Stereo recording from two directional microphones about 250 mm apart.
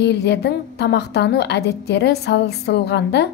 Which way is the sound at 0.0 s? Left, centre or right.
Left.